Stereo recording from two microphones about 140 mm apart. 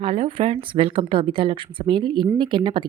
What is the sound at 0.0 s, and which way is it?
Speech, 40° right (ahead or behind).